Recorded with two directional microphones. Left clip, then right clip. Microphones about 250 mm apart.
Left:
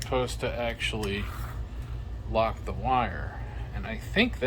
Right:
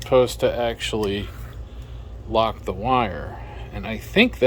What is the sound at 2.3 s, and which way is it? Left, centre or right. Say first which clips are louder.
Speech: right 6 dB; right.